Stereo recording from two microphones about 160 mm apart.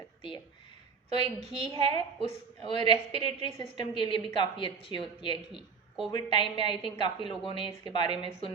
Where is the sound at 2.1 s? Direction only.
30° left (ahead or behind).